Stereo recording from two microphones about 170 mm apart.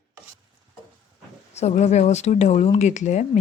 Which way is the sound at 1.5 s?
40° left (ahead or behind).